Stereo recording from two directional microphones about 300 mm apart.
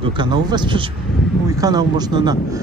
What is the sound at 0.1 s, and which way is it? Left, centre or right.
Speech, centre.